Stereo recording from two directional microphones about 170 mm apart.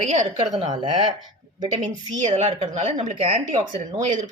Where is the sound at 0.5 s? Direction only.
30° right (ahead or behind).